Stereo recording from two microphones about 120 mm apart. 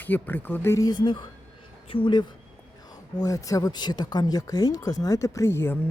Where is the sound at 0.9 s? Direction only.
40° left (ahead or behind).